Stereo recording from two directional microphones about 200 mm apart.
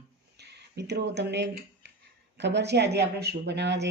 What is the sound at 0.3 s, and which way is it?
Speech, 55° right (ahead or behind).